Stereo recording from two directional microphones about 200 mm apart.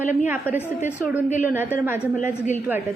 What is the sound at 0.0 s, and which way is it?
Speech, 35° left (ahead or behind).